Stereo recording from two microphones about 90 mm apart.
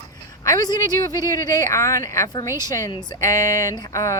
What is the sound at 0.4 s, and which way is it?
Speech, 45° left (ahead or behind).